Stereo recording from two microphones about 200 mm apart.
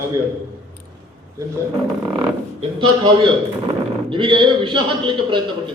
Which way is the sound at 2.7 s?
25° right (ahead or behind).